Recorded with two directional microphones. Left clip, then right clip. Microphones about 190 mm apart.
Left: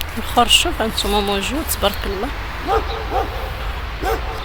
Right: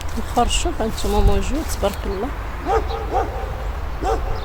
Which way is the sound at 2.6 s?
20° left (ahead or behind).